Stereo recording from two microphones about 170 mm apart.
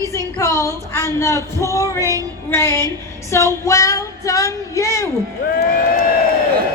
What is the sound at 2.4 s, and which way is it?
Speech, 15° left (ahead or behind).